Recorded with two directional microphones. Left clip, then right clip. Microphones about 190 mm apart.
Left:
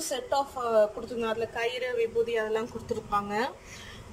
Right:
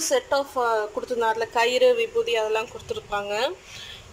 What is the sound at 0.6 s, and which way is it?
Speech, 25° right (ahead or behind).